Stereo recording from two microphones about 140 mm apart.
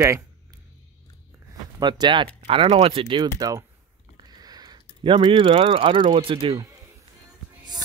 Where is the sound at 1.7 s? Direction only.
30° right (ahead or behind).